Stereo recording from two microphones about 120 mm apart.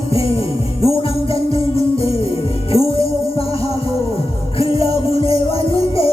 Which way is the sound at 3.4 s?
55° left (ahead or behind).